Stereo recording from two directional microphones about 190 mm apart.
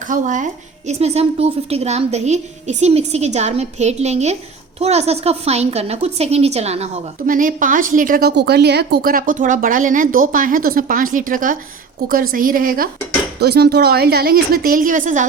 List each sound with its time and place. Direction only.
0.0 s a woman's voice: 40° right (ahead or behind)
13.4 s a woman's voice: 60° right (ahead or behind); by 15.3 s 40° right (ahead or behind)